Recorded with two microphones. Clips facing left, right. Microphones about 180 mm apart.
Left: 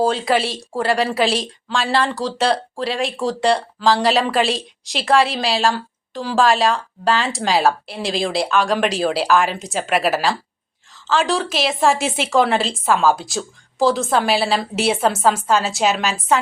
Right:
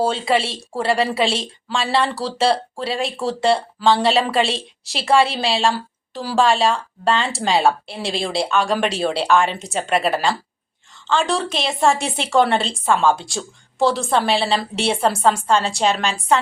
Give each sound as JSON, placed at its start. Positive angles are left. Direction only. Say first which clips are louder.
{"t": 0.0, "sound": "a woman's voice", "louder": "left 1 dB", "side_deg": 0}